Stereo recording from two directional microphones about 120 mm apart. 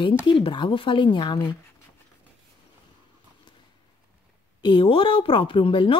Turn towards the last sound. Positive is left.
turn(degrees=45)  # may be behind; listen again after turning